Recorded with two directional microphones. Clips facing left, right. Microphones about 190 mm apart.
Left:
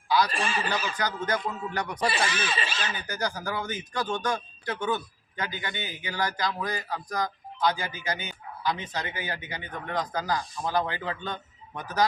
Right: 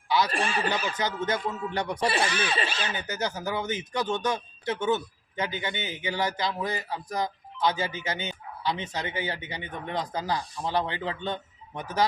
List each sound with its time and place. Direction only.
0.3 s speech: 60° right (ahead or behind)
0.9 s speech: 25° right (ahead or behind)
2.1 s speech: 60° right (ahead or behind)
2.9 s speech: 20° right (ahead or behind)